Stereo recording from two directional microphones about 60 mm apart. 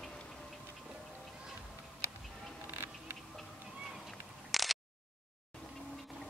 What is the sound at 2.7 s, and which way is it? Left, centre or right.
Patter, right.